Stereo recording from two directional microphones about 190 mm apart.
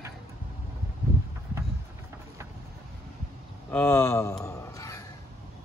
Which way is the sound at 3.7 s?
10° left (ahead or behind).